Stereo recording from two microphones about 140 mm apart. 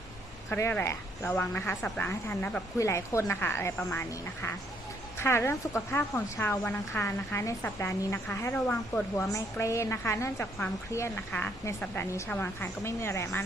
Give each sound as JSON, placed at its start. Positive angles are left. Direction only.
{"t": 0.5, "sound": "a woman's voice", "side_deg": 15}
{"t": 5.2, "sound": "a woman's voice", "side_deg": 20}